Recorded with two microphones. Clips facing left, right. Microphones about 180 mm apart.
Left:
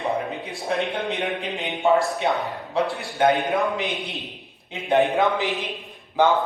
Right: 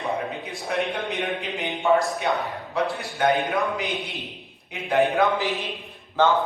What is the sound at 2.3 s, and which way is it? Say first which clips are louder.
A man's voice: left 1 dB; 25° left (ahead or behind).